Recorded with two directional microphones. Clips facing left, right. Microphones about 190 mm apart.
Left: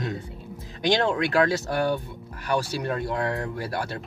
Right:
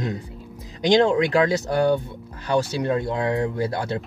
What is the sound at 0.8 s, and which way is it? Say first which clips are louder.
Speech: right 6 dB; 20° right (ahead or behind).